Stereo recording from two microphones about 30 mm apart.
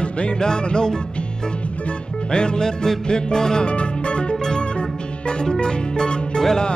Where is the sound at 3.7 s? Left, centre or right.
Left.